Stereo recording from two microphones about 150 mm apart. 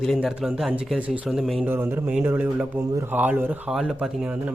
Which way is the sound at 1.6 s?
15° right (ahead or behind).